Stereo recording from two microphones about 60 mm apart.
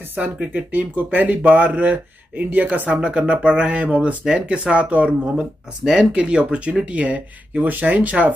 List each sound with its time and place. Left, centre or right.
0.1 s speech: right